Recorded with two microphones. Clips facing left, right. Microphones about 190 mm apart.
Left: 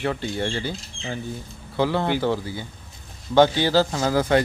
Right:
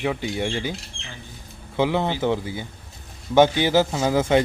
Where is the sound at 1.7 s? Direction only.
15° right (ahead or behind).